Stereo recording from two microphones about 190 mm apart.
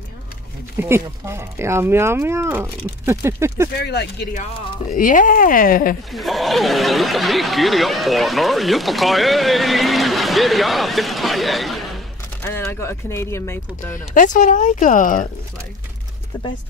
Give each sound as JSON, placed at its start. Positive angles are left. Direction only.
{"t": 0.7, "sound": "speech", "side_deg": -15}
{"t": 3.8, "sound": "speech", "side_deg": 60}
{"t": 4.9, "sound": "speech", "side_deg": 45}
{"t": 6.1, "sound": "speech", "side_deg": 0}
{"t": 12.4, "sound": "speech", "side_deg": 10}
{"t": 14.1, "sound": "speech", "side_deg": 40}